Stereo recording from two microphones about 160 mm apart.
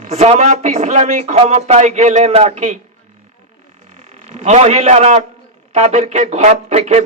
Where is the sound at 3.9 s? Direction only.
45° right (ahead or behind).